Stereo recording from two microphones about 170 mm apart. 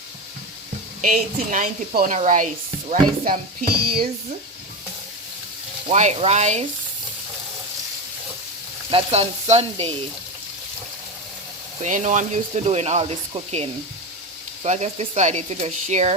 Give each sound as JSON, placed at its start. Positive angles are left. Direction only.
{"t": 1.0, "sound": "speech", "side_deg": -50}
{"t": 5.9, "sound": "sizzle", "side_deg": -40}
{"t": 8.9, "sound": "sizzle", "side_deg": -35}
{"t": 11.8, "sound": "speech", "side_deg": -45}
{"t": 12.6, "sound": "sizzle", "side_deg": -40}
{"t": 14.6, "sound": "speech", "side_deg": -40}